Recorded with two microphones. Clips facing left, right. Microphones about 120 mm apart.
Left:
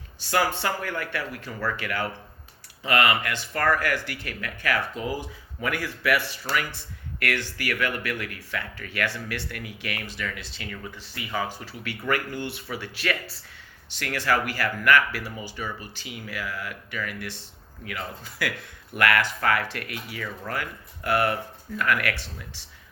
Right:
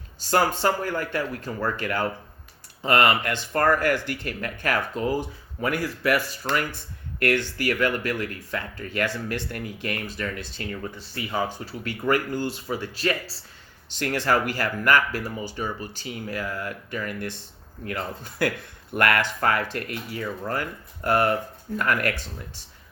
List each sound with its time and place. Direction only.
0.2 s speech: 45° right (ahead or behind)